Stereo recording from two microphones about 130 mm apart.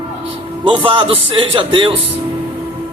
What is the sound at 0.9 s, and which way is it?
Speech, 45° right (ahead or behind).